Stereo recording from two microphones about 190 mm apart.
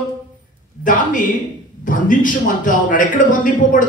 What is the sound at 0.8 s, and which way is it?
A man's voice, 45° left (ahead or behind).